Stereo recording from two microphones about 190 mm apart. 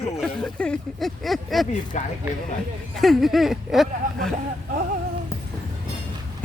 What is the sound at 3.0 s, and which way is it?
Speech, centre (ahead or behind).